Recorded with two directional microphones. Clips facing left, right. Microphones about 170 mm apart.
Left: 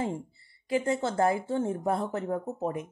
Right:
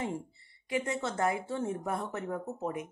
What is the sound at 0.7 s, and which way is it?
Speech, 30° left (ahead or behind).